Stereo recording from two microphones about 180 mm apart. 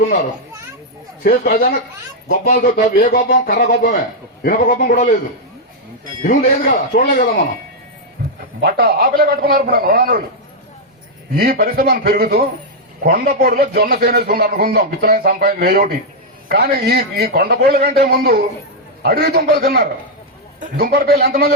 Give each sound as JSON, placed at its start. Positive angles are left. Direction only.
{"t": 0.0, "sound": "a man's voice", "side_deg": 60}
{"t": 6.2, "sound": "speech", "side_deg": 50}
{"t": 8.6, "sound": "speech", "side_deg": -55}
{"t": 11.3, "sound": "speech", "side_deg": -55}